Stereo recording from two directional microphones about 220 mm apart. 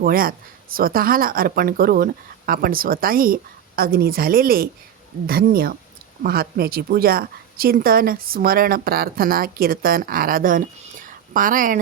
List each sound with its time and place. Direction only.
0.0 s a woman's voice: 40° right (ahead or behind)